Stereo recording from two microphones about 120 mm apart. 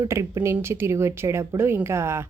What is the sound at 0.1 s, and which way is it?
A woman's voice, 25° right (ahead or behind).